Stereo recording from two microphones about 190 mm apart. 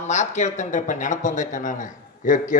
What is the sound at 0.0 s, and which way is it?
A man's voice, 40° left (ahead or behind).